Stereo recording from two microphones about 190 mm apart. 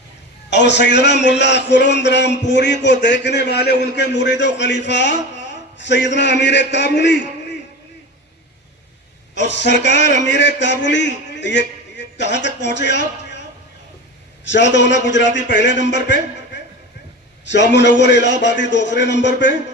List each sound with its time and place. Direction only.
0.5 s a man's voice: 65° left (ahead or behind)
9.3 s a man's voice: 70° left (ahead or behind)
14.4 s a man's voice: 70° left (ahead or behind)